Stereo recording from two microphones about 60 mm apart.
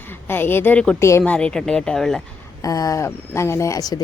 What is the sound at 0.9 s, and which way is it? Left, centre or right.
Speech, left.